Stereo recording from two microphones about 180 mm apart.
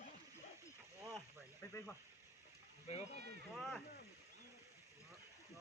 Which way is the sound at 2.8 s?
35° left (ahead or behind).